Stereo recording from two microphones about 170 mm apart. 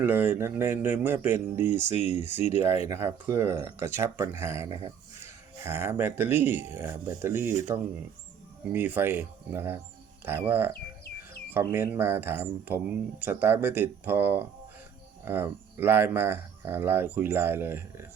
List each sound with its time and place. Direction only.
0.0 s speech: 10° right (ahead or behind)
8.7 s speech: 10° right (ahead or behind)